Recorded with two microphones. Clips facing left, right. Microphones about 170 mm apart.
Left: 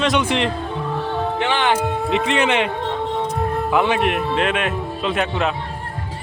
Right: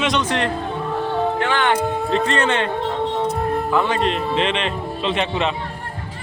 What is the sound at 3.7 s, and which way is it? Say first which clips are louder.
Speech: left 3 dB; 10° left (ahead or behind).